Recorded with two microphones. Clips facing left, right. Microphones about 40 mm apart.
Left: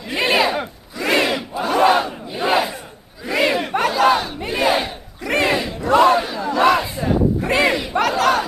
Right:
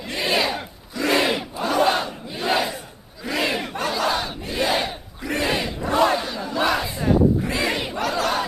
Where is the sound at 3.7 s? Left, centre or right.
Left.